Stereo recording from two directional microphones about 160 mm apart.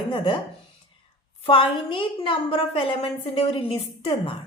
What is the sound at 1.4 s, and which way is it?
A woman's voice, 30° left (ahead or behind).